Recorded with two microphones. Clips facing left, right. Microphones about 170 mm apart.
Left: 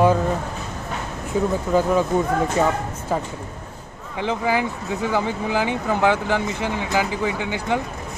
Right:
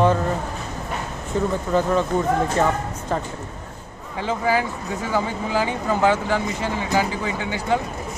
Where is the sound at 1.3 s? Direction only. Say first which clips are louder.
Left 1 dB; 5° left (ahead or behind).